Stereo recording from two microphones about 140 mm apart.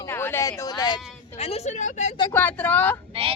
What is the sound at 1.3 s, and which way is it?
Speech, 45° left (ahead or behind).